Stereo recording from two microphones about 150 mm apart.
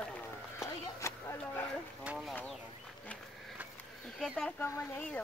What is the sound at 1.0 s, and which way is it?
Speech, 20° left (ahead or behind).